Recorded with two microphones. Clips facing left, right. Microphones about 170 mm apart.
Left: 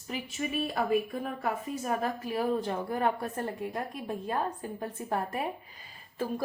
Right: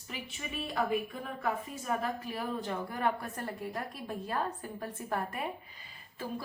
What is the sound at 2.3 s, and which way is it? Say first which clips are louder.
Speech: left 6 dB; 40° left (ahead or behind).